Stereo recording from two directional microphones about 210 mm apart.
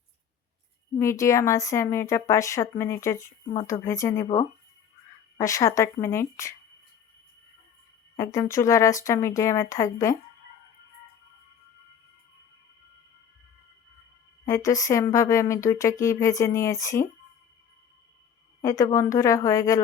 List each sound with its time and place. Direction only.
0.9 s a woman's voice: 15° left (ahead or behind)
5.4 s a woman's voice: 15° left (ahead or behind)
8.1 s a woman's voice: 15° left (ahead or behind)
14.4 s a woman's voice: 15° left (ahead or behind)
18.6 s a woman's voice: 15° left (ahead or behind)